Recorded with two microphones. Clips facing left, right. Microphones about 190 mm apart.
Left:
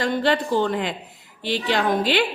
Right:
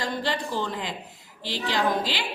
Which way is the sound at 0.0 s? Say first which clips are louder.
Left 7 dB; 65° left (ahead or behind).